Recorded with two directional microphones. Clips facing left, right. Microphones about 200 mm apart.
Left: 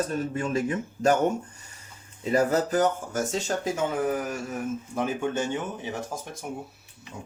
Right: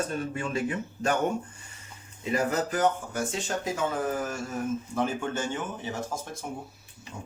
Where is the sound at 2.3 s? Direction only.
40° left (ahead or behind).